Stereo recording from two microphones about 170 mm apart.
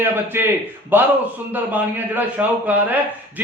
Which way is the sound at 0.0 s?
15° right (ahead or behind).